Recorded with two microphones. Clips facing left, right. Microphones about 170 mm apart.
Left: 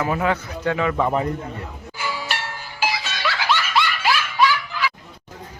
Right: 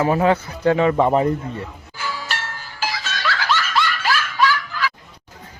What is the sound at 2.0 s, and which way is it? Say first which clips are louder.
Music: left 1 dB; 10° left (ahead or behind).